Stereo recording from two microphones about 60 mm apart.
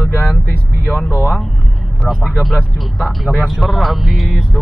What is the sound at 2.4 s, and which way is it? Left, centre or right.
Speech, centre.